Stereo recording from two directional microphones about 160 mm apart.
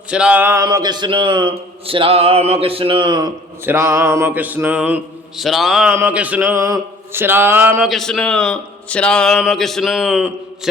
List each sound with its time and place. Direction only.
0.1 s mantra: 5° right (ahead or behind)
0.6 s mantra: 25° right (ahead or behind)
3.6 s mantra: 15° right (ahead or behind)
5.4 s a man's voice: centre (ahead or behind)
5.9 s mantra: 10° right (ahead or behind)
7.9 s a man's voice: centre (ahead or behind)